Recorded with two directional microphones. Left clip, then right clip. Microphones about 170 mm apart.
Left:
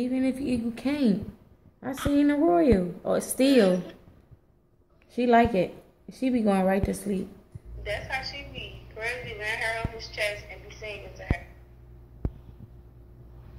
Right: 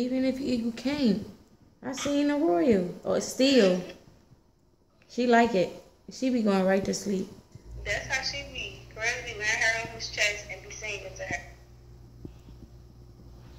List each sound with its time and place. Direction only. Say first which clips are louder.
0.0 s a woman's voice: even; 10° left (ahead or behind)
5.1 s speech: left 1 dB; 15° left (ahead or behind)
7.8 s a sound: right 2 dB; 15° left (ahead or behind)
10.1 s a woman's voice: right 2 dB; 15° left (ahead or behind)